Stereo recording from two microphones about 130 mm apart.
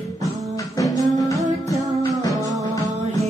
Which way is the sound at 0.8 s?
25° left (ahead or behind).